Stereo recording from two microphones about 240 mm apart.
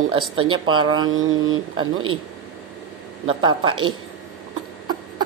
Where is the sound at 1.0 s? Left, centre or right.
Right.